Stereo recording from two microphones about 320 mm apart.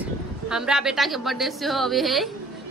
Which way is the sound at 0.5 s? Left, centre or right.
Centre.